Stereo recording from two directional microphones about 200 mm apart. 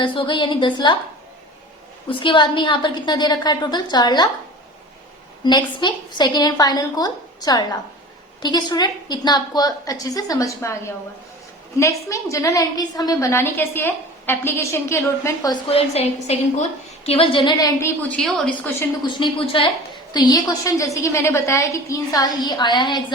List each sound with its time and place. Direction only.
0.0 s a woman's voice: 25° left (ahead or behind)
2.0 s a woman's voice: 25° left (ahead or behind)
5.4 s a woman's voice: 20° left (ahead or behind)
15.7 s a woman's voice: 30° left (ahead or behind); by 18.9 s 5° left (ahead or behind)
19.0 s a woman's voice: 25° left (ahead or behind)